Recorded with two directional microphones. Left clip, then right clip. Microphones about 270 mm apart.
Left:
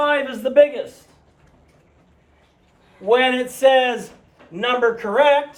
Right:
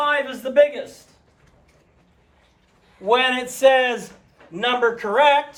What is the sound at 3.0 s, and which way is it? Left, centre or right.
Speech, centre.